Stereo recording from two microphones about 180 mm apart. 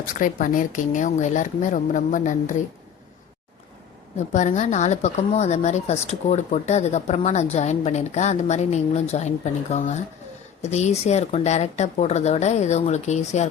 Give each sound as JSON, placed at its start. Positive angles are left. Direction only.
{"t": 0.0, "sound": "speech", "side_deg": 45}
{"t": 4.2, "sound": "speech", "side_deg": 40}